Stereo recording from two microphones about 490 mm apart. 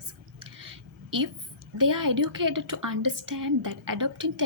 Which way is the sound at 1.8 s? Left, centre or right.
Right.